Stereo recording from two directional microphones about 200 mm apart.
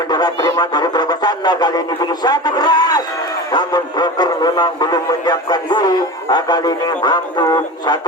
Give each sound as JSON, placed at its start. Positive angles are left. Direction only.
{"t": 0.1, "sound": "speech", "side_deg": 20}